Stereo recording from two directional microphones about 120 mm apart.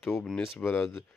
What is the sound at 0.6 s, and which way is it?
Speech, 20° left (ahead or behind).